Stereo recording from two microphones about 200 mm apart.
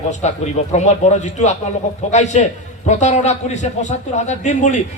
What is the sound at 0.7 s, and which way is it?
A man's voice, 35° left (ahead or behind).